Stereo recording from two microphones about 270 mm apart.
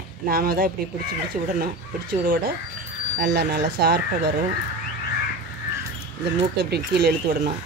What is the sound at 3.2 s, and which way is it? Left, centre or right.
Speech, right.